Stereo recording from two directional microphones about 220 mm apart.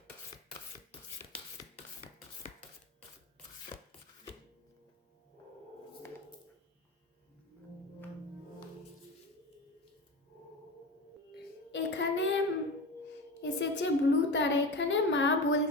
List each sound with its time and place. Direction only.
11.7 s child singing: 55° left (ahead or behind)
13.4 s a woman's voice: 55° left (ahead or behind)